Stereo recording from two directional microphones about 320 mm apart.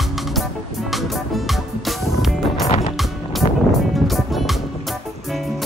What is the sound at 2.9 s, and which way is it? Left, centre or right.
Music, centre.